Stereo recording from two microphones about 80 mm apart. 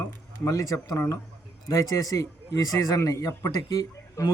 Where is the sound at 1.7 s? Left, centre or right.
Left.